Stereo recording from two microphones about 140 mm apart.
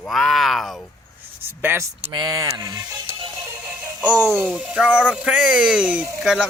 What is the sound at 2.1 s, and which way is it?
Speech, 30° right (ahead or behind).